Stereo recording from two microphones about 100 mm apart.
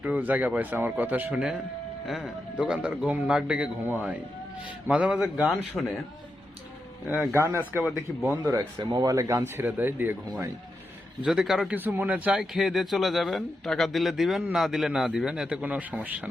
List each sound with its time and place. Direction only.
0.0 s a man's voice: 15° right (ahead or behind); by 5.9 s centre (ahead or behind)
7.1 s a man's voice: centre (ahead or behind)
7.3 s speech: 25° right (ahead or behind)
11.3 s a man's voice: 5° right (ahead or behind)
11.7 s a man's voice: 20° right (ahead or behind)